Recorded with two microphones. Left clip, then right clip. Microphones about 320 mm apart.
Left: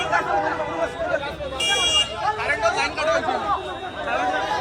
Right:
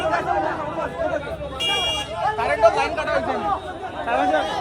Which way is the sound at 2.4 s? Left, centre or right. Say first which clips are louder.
Right 6 dB; centre.